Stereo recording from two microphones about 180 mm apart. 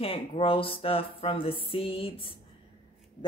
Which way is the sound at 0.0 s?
30° left (ahead or behind).